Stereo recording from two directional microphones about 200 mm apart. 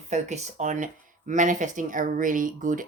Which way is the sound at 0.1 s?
35° right (ahead or behind).